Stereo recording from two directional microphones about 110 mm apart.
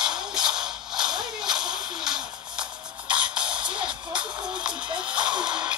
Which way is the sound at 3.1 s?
10° right (ahead or behind).